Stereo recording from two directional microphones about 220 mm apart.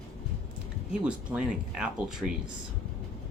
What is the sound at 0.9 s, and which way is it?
Speech, 5° right (ahead or behind).